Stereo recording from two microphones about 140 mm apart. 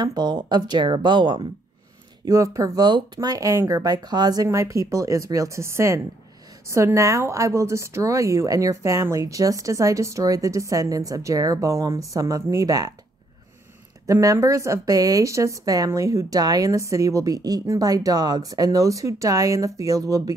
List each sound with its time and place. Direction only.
0.0 s speech: 30° right (ahead or behind)
2.2 s speech: 20° right (ahead or behind)
14.0 s speech: 25° right (ahead or behind)